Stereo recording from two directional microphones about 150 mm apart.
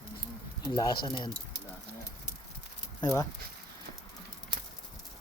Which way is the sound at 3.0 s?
25° left (ahead or behind).